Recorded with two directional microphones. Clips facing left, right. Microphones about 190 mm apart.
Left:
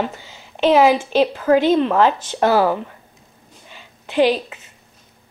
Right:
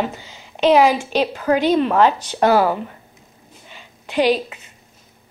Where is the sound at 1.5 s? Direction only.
15° right (ahead or behind).